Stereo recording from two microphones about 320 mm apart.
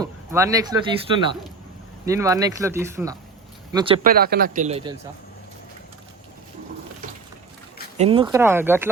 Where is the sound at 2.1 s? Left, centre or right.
Centre.